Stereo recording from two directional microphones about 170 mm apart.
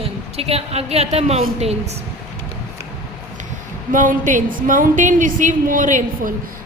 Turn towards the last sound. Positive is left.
turn(degrees=-50)  # may be behind; listen again after turning